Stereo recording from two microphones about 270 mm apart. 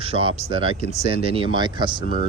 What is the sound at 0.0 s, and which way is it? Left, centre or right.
Speech, centre.